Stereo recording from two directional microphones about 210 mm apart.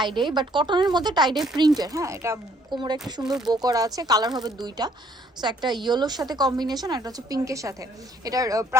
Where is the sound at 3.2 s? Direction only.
Centre (ahead or behind).